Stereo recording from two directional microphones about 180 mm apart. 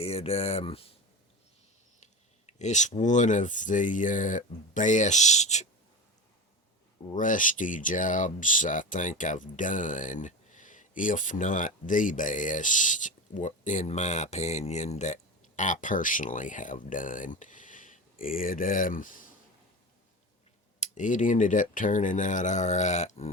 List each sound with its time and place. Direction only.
0.0 s speech: 35° left (ahead or behind)
2.5 s speech: 40° left (ahead or behind)
7.1 s speech: 45° left (ahead or behind)
20.7 s speech: 40° left (ahead or behind)